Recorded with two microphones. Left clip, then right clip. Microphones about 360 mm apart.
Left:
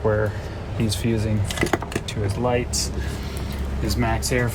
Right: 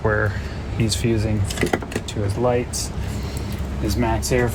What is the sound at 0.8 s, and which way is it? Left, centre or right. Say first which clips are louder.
Speech: right 3 dB; centre.